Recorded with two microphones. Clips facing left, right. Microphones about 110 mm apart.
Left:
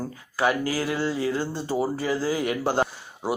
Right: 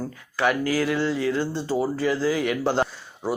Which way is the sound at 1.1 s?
30° left (ahead or behind).